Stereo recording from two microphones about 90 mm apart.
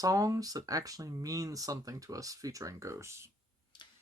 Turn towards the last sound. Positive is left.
turn(degrees=-30)  # may be behind; listen again after turning